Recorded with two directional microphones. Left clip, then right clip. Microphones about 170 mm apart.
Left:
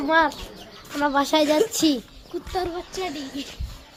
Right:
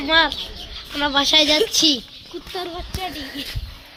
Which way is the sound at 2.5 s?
60° left (ahead or behind).